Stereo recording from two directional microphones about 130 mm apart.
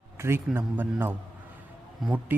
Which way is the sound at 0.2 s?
20° right (ahead or behind).